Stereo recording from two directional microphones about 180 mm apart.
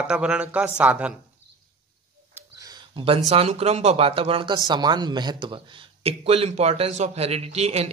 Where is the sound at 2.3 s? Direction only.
20° right (ahead or behind).